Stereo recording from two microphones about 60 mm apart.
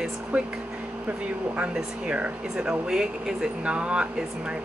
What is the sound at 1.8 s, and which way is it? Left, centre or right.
Speech, right.